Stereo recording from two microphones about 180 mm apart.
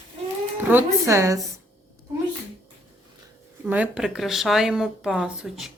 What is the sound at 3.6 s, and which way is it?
Speech, 10° right (ahead or behind).